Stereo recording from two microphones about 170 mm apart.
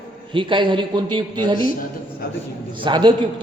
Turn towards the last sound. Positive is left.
turn(degrees=-30)  # may be behind; listen again after turning